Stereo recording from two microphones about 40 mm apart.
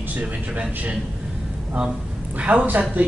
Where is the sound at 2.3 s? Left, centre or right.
Right.